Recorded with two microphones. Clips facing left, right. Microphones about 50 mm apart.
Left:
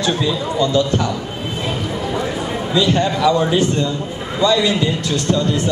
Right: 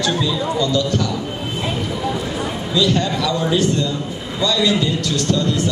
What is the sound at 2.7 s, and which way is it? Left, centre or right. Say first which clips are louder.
A man's voice: left 2 dB; left.